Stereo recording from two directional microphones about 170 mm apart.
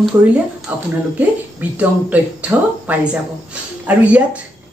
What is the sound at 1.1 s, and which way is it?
Speech, 10° right (ahead or behind).